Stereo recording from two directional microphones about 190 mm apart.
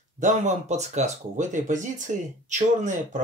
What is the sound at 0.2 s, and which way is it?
Speech, 40° right (ahead or behind).